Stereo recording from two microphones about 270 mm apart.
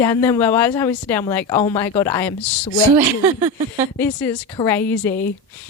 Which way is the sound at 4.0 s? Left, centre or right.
Centre.